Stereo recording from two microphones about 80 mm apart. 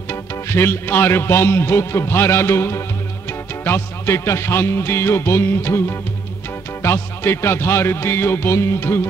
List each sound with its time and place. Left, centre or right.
0.1 s a man's voice: left